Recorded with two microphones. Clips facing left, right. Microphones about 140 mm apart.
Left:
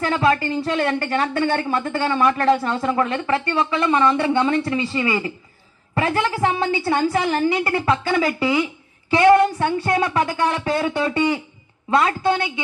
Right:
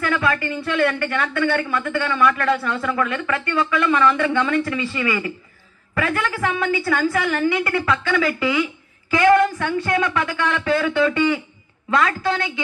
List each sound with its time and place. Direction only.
0.0 s a woman's voice: 30° left (ahead or behind)